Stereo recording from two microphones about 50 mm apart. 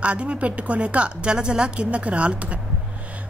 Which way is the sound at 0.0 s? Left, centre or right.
Right.